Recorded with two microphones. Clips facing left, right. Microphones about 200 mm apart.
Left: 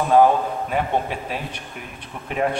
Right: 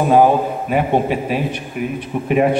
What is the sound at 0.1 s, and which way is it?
A man's voice, 15° right (ahead or behind).